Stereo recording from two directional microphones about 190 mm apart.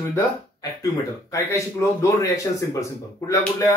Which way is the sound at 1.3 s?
15° left (ahead or behind).